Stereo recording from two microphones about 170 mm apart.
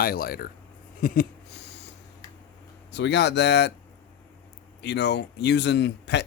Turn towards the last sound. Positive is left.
turn(degrees=90)